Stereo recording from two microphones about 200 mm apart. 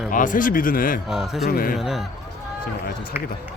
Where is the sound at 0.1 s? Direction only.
40° left (ahead or behind).